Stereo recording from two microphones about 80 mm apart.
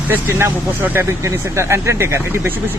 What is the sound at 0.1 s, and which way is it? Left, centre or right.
Speech, right.